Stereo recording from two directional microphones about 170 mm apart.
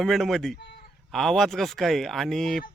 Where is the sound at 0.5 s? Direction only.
70° left (ahead or behind).